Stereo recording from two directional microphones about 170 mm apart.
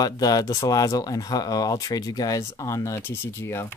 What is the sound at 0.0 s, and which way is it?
Speech, 20° left (ahead or behind).